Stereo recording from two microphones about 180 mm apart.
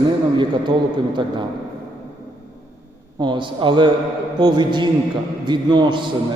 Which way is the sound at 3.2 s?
25° right (ahead or behind).